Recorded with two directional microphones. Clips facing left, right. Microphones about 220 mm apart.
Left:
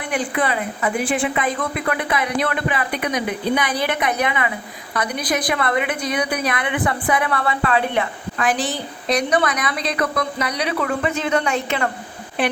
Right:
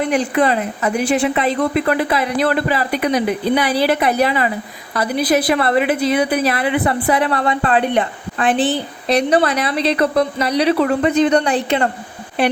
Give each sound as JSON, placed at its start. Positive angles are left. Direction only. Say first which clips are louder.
{"t": 0.0, "sound": "a woman's voice", "louder": "right 6 dB", "side_deg": -40}
{"t": 5.5, "sound": "a woman's voice", "louder": "right 6 dB", "side_deg": -30}